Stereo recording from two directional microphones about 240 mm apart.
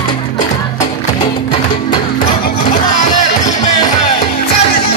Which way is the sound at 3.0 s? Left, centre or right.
Left.